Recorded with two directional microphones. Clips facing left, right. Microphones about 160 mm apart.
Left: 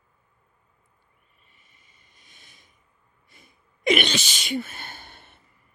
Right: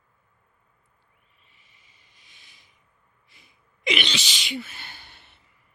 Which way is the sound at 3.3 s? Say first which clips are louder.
Left 4 dB; 50° left (ahead or behind).